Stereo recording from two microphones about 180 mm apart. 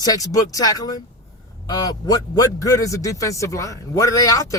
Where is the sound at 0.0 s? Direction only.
20° left (ahead or behind).